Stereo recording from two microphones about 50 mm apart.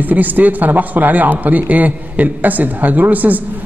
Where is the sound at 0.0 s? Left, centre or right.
Right.